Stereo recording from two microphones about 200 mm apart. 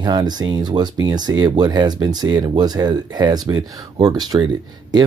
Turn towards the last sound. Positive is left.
turn(degrees=-20)  # may be behind; listen again after turning